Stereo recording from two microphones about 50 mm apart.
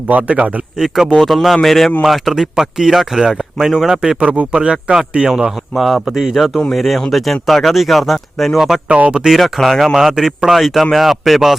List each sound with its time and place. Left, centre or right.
0.1 s speech: right
0.8 s speech: centre
4.2 s speech: right
5.7 s speech: centre
6.1 s speech: centre
8.9 s speech: right
9.4 s speech: centre
9.9 s speech: centre
10.5 s speech: centre